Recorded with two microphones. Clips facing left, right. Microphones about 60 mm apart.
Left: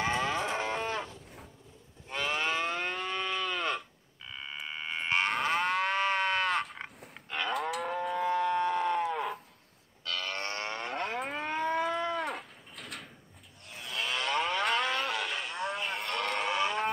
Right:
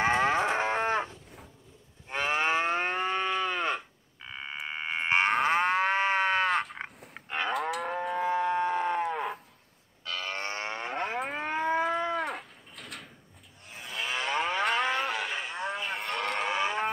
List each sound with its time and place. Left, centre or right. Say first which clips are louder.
0.0 s moo: right 5 dB; right
4.6 s livestock: right 4 dB; right
6.5 s frog: right 3 dB; centre
7.2 s cattle: right 3 dB; right
7.5 s livestock: even; centre
7.9 s moo: even; centre
10.0 s livestock: right 1 dB; centre
13.7 s moo: right 1 dB; centre